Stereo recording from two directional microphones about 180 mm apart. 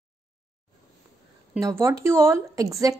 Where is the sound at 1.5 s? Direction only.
15° right (ahead or behind).